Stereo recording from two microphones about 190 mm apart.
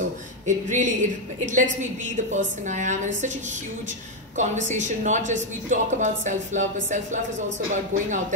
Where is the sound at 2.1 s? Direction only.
40° right (ahead or behind).